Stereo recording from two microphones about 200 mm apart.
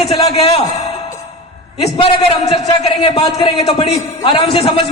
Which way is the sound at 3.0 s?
25° left (ahead or behind).